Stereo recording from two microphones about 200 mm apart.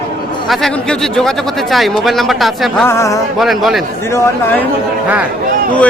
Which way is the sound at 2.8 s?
15° left (ahead or behind).